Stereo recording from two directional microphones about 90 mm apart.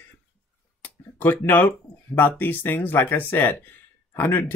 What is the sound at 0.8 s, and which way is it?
Speech, 20° left (ahead or behind).